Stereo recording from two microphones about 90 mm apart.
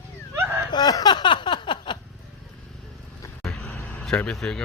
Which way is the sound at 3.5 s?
15° left (ahead or behind).